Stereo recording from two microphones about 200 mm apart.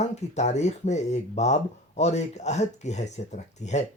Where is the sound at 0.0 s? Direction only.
35° left (ahead or behind).